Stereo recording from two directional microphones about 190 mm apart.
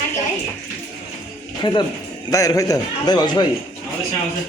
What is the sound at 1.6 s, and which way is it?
A man's voice, 25° left (ahead or behind).